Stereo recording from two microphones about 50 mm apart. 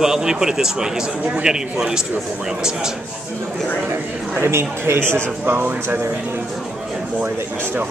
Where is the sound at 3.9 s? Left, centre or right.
Right.